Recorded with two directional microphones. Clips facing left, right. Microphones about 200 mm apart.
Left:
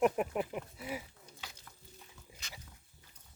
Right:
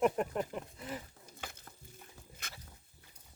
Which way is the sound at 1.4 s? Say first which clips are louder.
Right 5 dB; 50° right (ahead or behind).